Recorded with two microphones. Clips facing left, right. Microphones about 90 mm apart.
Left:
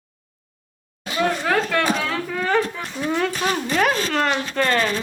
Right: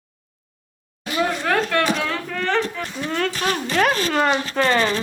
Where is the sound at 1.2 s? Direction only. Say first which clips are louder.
Even; centre (ahead or behind).